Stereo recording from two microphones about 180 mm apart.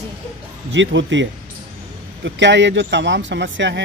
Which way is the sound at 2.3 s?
80° right.